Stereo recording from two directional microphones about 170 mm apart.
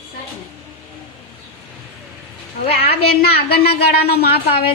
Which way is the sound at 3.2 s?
65° left (ahead or behind).